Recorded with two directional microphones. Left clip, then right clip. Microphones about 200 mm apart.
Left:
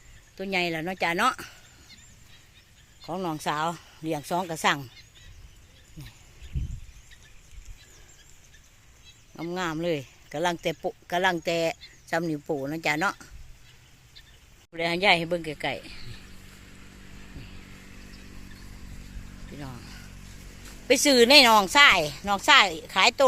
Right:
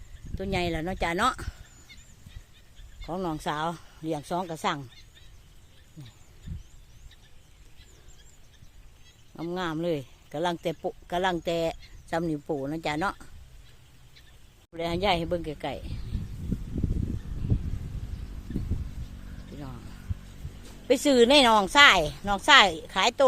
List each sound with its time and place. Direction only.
0.3 s speech: 10° right (ahead or behind)
3.1 s speech: 10° right (ahead or behind); by 4.9 s 5° left (ahead or behind)
9.3 s speech: 5° right (ahead or behind)
14.7 s speech: 5° right (ahead or behind)
19.5 s music: centre (ahead or behind)
20.8 s speech: 5° right (ahead or behind)